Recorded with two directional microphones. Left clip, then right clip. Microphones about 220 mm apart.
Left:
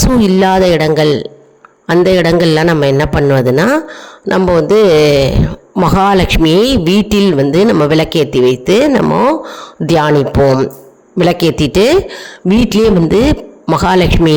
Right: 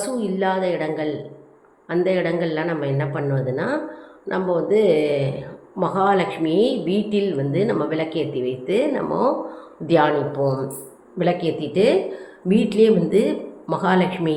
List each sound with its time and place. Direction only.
0.2 s a man's voice: 50° left (ahead or behind)